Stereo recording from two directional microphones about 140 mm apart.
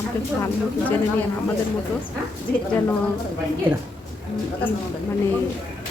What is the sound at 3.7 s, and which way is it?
Speech, 10° right (ahead or behind).